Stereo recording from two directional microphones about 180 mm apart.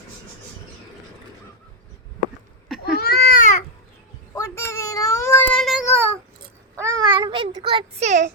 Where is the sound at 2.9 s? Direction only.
60° left (ahead or behind).